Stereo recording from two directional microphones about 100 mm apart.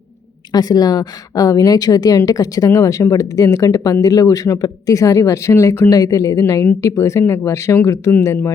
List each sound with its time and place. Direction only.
0.5 s a woman's voice: 40° left (ahead or behind)